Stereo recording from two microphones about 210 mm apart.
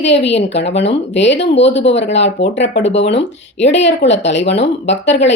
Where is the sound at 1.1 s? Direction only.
60° left (ahead or behind).